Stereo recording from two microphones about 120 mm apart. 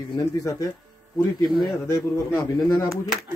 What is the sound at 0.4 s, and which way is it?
Speech, 30° left (ahead or behind).